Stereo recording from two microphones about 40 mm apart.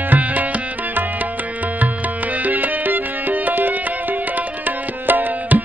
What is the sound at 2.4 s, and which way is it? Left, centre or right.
Music, right.